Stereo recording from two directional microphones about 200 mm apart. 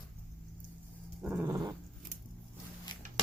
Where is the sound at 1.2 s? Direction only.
10° right (ahead or behind).